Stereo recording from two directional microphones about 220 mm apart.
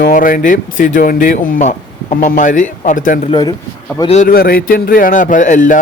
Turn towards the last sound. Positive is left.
turn(degrees=35)  # may be behind; listen again after turning